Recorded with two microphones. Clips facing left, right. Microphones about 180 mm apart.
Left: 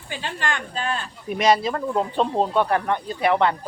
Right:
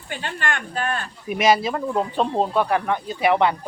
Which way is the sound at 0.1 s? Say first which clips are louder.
Even; 55° right (ahead or behind).